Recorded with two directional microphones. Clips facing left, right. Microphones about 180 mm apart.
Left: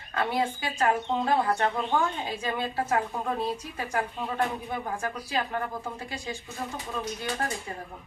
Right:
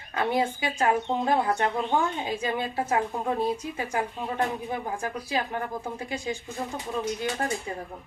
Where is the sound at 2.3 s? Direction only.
15° right (ahead or behind).